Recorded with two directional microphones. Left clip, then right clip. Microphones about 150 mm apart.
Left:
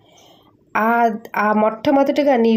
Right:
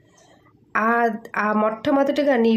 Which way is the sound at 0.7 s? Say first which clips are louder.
Left 3 dB; 15° left (ahead or behind).